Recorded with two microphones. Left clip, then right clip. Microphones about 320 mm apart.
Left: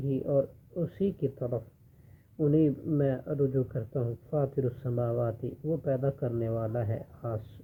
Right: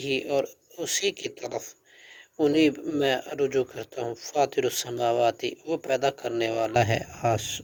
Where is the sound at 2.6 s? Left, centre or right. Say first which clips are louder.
Right 4 dB; centre.